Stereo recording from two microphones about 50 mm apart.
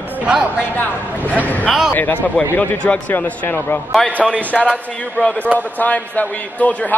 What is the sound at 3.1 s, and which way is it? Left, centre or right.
Speech, left.